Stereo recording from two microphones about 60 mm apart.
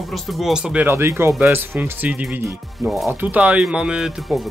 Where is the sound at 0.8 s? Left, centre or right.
Right.